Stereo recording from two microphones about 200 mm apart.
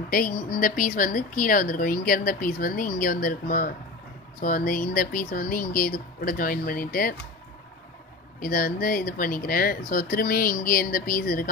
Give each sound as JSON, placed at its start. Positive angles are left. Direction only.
{"t": 0.1, "sound": "speech", "side_deg": 45}
{"t": 8.4, "sound": "speech", "side_deg": 45}